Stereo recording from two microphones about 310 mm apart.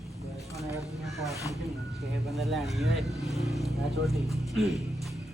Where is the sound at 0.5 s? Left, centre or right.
Centre.